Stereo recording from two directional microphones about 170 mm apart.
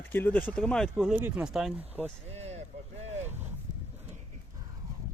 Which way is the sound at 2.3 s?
40° right (ahead or behind).